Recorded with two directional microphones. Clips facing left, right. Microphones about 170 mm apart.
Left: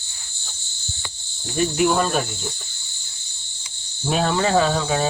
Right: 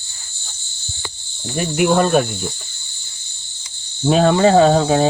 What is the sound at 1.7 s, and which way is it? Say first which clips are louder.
Cricket: right 7 dB; 55° right (ahead or behind).